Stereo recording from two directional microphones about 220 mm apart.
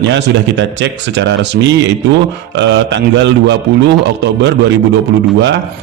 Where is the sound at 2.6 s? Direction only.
55° right (ahead or behind).